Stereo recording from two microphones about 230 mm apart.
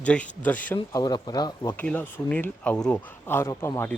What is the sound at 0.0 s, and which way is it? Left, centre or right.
Speech, centre.